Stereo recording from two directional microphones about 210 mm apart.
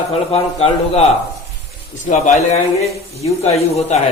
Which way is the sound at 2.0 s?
35° left (ahead or behind).